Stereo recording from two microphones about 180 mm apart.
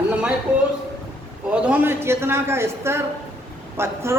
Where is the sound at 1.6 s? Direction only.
10° right (ahead or behind).